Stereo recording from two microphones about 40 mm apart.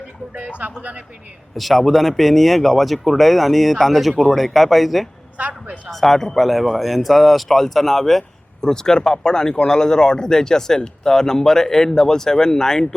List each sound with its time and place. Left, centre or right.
0.8 s a man's voice: right
1.5 s speech: centre
5.4 s a man's voice: right
5.9 s speech: centre